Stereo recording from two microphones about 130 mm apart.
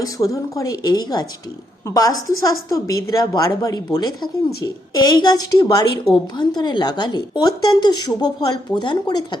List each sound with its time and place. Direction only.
0.0 s a woman's voice: 25° left (ahead or behind)